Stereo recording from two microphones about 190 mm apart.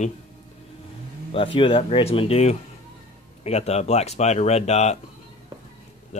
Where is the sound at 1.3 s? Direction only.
30° left (ahead or behind).